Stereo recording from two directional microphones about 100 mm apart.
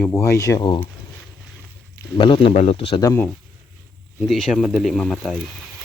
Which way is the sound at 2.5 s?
90° left.